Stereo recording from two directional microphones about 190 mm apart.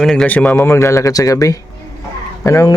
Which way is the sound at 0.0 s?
5° left (ahead or behind).